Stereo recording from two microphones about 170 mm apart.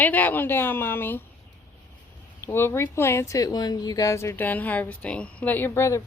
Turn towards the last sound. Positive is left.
turn(degrees=15)  # may be behind; listen again after turning